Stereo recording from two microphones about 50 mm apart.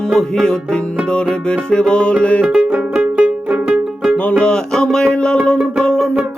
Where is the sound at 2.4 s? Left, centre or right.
Centre.